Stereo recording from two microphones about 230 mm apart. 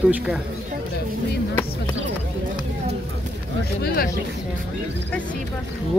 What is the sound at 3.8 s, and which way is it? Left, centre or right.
Speech, left.